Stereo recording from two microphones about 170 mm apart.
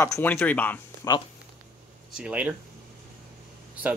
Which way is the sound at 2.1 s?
5° right (ahead or behind).